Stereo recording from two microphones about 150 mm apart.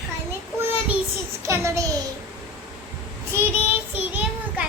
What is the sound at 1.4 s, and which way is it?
Speech, 20° right (ahead or behind).